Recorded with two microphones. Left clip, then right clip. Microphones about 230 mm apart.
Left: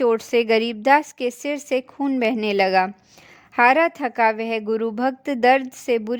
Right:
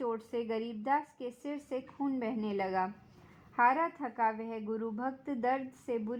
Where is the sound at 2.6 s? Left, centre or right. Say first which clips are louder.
Left 15 dB; left.